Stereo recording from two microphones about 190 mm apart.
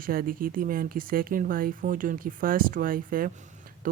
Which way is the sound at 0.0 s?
50° right (ahead or behind).